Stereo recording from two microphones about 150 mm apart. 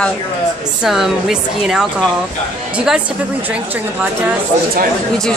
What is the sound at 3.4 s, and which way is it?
Speech, 10° right (ahead or behind).